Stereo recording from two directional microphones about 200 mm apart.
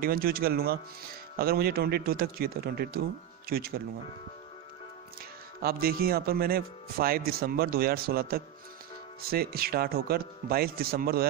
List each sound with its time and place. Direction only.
0.0 s speech: 45° right (ahead or behind)
5.6 s speech: 50° right (ahead or behind)